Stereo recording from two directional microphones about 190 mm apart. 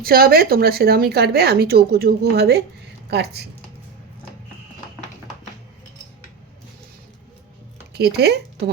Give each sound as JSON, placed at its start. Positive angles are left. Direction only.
{"t": 0.0, "sound": "speech", "side_deg": -50}
{"t": 7.9, "sound": "speech", "side_deg": -60}